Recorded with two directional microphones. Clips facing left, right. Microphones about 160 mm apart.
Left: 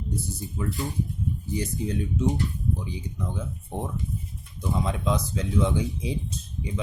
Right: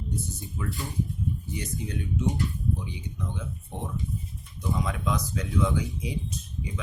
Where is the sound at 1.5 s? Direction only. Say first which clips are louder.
Left 5 dB; 35° left (ahead or behind).